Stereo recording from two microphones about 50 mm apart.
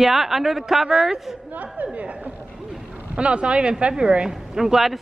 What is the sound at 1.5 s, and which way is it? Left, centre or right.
A man's voice, right.